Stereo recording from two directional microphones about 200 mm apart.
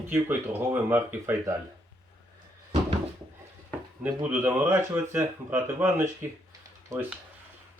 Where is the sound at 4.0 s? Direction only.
10° right (ahead or behind).